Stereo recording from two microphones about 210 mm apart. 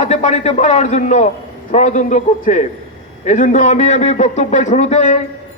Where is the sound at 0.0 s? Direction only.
30° left (ahead or behind).